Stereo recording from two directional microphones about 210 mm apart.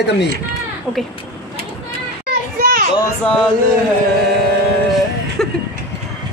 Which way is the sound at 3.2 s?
5° left (ahead or behind).